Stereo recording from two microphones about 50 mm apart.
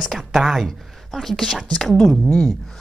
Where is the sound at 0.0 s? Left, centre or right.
Centre.